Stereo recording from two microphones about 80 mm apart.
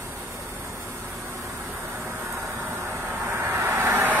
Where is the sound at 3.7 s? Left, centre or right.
Right.